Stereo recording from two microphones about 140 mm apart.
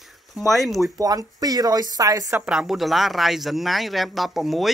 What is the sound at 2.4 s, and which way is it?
Speech, 10° right (ahead or behind).